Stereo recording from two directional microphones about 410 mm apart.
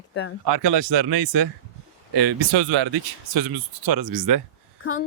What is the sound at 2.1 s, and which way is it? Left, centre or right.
Speech, right.